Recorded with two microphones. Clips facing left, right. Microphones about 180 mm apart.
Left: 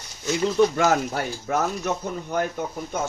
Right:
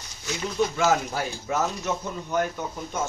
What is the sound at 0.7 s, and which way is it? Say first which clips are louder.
Speech: left 2 dB; 55° left (ahead or behind).